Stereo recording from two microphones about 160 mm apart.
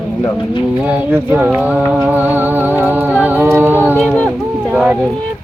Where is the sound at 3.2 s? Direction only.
10° right (ahead or behind).